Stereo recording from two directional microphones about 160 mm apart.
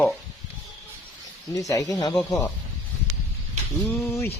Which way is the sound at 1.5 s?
20° left (ahead or behind).